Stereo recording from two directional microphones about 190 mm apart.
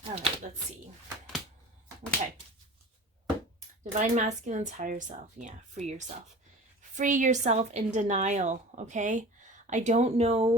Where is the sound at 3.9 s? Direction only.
40° right (ahead or behind).